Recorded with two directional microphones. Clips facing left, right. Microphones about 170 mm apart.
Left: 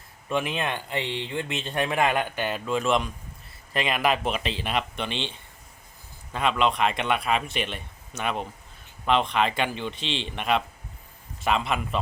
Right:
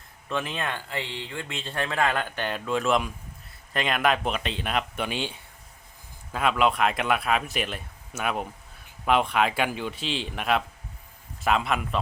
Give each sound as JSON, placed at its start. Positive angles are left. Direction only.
{"t": 0.3, "sound": "speech", "side_deg": 15}